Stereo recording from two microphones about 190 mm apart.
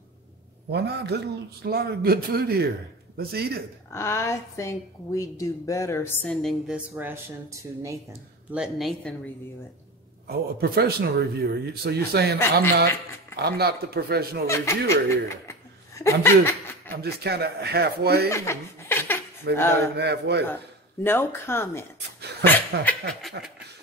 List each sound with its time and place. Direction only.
0.7 s speech: 60° right (ahead or behind)
3.9 s a woman's voice: 15° left (ahead or behind)
6.3 s a woman's voice: centre (ahead or behind)
7.8 s speech: 15° right (ahead or behind)
8.5 s a woman's voice: centre (ahead or behind)
10.2 s speech: 55° right (ahead or behind)
13.4 s speech: 55° right (ahead or behind)
14.5 s speech: 15° left (ahead or behind)
17.0 s speech: 55° right (ahead or behind)
18.3 s laughter: 15° left (ahead or behind)
19.5 s speech: 60° right (ahead or behind)
21.0 s a woman's voice: 10° left (ahead or behind)